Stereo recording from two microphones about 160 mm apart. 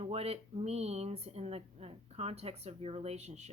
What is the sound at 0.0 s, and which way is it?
A woman's voice, 40° right (ahead or behind).